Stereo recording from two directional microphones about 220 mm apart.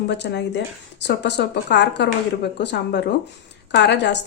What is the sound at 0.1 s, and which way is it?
Speech, 50° left (ahead or behind).